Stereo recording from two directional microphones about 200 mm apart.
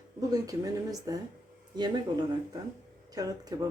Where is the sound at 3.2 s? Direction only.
20° right (ahead or behind).